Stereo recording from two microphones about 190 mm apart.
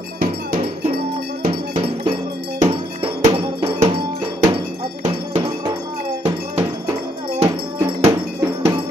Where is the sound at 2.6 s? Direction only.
25° right (ahead or behind).